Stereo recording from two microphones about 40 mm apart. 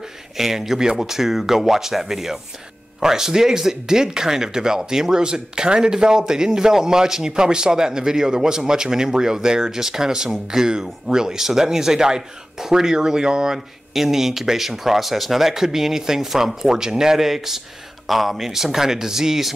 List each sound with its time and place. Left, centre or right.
0.4 s speech: centre
13.9 s speech: centre